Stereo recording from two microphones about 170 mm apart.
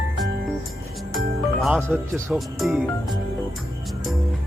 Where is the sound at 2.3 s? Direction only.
5° right (ahead or behind).